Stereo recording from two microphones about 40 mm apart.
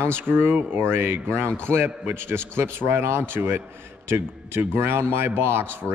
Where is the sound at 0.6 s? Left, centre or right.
Right.